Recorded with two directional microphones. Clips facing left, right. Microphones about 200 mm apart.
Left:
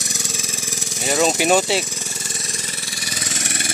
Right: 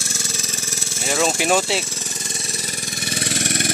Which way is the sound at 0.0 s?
15° left (ahead or behind).